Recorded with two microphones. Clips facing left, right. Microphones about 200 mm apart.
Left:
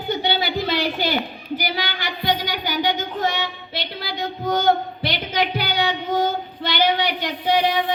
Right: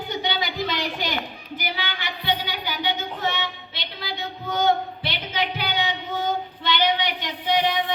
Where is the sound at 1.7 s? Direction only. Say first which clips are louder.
Left 4 dB; 40° left (ahead or behind).